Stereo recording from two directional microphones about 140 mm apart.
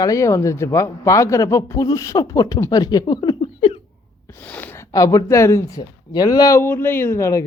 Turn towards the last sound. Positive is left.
turn(degrees=20)  # may be behind; listen again after turning